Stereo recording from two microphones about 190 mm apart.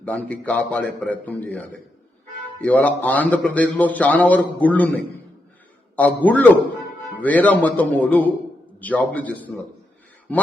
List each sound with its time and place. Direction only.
0.0 s a man's voice: 5° left (ahead or behind)
6.0 s a man's voice: 10° left (ahead or behind)